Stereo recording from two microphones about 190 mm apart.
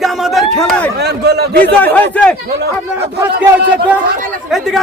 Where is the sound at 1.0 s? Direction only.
60° right (ahead or behind).